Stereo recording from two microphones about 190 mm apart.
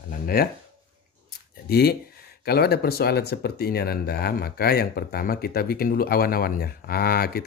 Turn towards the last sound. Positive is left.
turn(degrees=50)  # may be behind; listen again after turning